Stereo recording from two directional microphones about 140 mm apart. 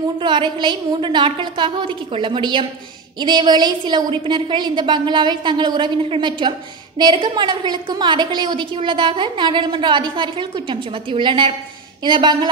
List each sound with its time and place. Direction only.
0.2 s a woman's voice: 35° right (ahead or behind)